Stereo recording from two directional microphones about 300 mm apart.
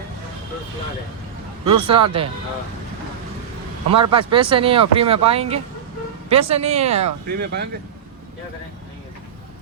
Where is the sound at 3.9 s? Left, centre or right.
Centre.